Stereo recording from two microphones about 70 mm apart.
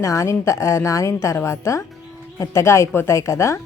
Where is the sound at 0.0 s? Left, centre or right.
Left.